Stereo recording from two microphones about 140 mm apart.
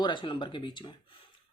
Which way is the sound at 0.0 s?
35° left (ahead or behind).